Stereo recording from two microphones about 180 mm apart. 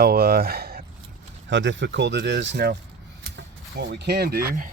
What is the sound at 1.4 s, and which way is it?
Speech, 90° right.